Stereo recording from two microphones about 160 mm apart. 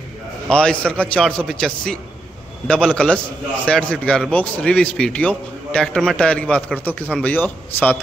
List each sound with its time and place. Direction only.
0.5 s a man's voice: 5° left (ahead or behind)